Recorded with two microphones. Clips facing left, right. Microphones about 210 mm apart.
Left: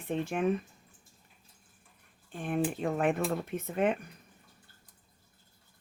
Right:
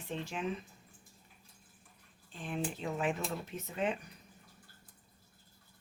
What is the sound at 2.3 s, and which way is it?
Speech, 55° left (ahead or behind).